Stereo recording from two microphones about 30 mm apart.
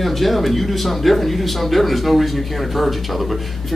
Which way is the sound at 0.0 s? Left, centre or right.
Centre.